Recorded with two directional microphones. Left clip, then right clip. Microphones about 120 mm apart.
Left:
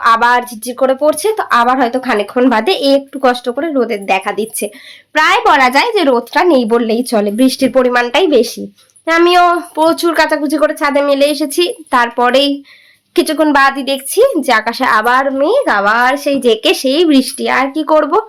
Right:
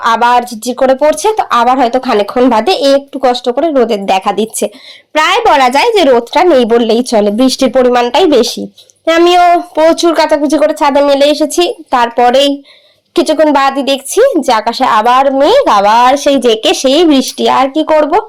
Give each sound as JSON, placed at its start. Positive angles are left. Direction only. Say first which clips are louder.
{"t": 0.3, "sound": "speech", "louder": "right 4 dB", "side_deg": -25}
{"t": 2.5, "sound": "speech", "louder": "right 2 dB", "side_deg": -10}
{"t": 3.4, "sound": "speech", "louder": "right 6 dB", "side_deg": -20}
{"t": 6.1, "sound": "speech", "louder": "right 4 dB", "side_deg": -15}
{"t": 6.7, "sound": "speech", "louder": "right 4 dB", "side_deg": -30}
{"t": 9.2, "sound": "speech", "louder": "right 3 dB", "side_deg": -10}
{"t": 17.7, "sound": "speech", "louder": "right 3 dB", "side_deg": -10}